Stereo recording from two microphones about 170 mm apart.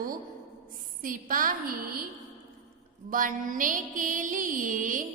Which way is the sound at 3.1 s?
55° right (ahead or behind).